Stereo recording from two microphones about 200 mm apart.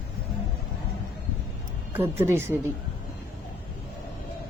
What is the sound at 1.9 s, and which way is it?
Speech, 10° right (ahead or behind).